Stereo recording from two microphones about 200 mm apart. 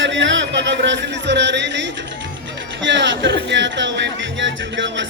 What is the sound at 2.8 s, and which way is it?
Music, 65° right (ahead or behind).